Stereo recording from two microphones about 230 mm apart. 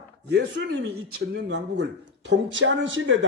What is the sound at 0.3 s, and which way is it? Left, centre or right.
Speech, right.